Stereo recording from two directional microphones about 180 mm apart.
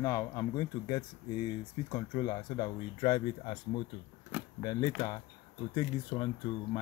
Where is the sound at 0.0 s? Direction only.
20° left (ahead or behind).